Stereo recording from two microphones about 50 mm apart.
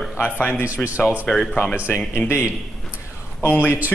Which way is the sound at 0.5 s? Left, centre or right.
Right.